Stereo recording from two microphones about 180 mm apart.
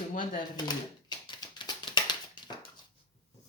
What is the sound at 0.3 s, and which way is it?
Speech, 25° left (ahead or behind).